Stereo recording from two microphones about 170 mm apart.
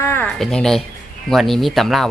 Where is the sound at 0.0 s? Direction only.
15° left (ahead or behind).